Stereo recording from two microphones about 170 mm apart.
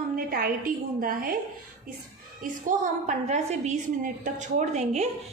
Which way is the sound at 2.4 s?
50° right (ahead or behind).